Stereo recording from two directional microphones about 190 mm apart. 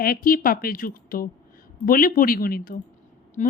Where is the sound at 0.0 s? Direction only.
50° left (ahead or behind).